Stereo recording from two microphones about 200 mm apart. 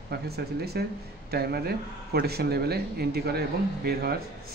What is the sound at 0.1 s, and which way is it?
Speech, 55° right (ahead or behind).